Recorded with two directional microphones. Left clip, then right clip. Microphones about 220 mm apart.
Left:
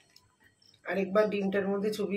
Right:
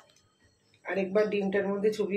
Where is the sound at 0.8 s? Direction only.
40° left (ahead or behind).